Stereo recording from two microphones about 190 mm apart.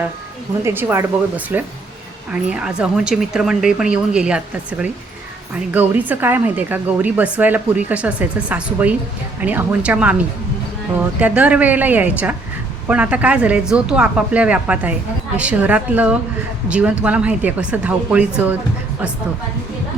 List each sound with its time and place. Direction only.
0.6 s a woman's voice: 10° right (ahead or behind)
11.2 s speech: 10° right (ahead or behind)